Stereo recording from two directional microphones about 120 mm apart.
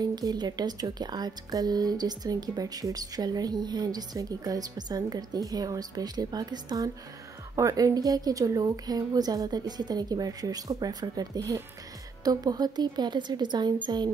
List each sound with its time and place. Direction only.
0.0 s speech: 35° right (ahead or behind)